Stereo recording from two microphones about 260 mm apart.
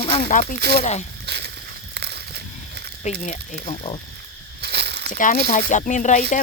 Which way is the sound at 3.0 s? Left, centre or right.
Left.